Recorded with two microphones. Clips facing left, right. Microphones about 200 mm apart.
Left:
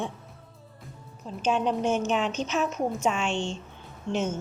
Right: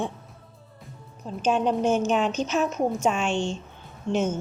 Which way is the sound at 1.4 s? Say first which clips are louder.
Right 3 dB; 40° right (ahead or behind).